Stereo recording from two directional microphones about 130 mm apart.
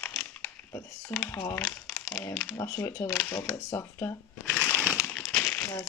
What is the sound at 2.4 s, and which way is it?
Speech, 25° left (ahead or behind).